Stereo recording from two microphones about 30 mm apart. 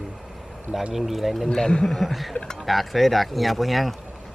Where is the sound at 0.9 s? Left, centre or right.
Centre.